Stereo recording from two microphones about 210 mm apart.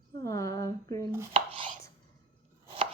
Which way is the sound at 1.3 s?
25° right (ahead or behind).